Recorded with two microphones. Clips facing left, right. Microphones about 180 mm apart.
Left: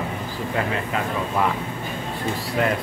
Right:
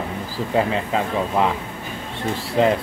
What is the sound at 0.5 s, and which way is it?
Speech, 25° right (ahead or behind).